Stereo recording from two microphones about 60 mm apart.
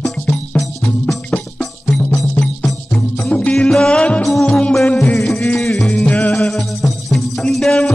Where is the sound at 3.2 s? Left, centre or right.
Left.